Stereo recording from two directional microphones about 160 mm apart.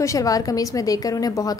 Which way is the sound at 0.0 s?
20° left (ahead or behind).